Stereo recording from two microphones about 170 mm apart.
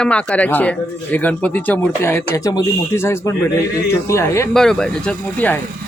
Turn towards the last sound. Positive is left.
turn(degrees=10)  # may be behind; listen again after turning